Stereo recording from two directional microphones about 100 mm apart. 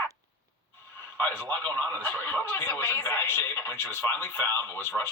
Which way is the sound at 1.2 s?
20° left (ahead or behind).